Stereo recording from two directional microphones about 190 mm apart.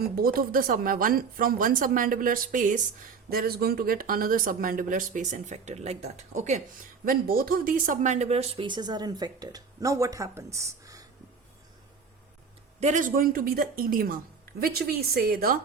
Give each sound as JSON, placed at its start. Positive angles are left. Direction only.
{"t": 0.0, "sound": "speech", "side_deg": -50}
{"t": 3.2, "sound": "speech", "side_deg": -55}
{"t": 7.0, "sound": "speech", "side_deg": -50}
{"t": 12.8, "sound": "speech", "side_deg": -40}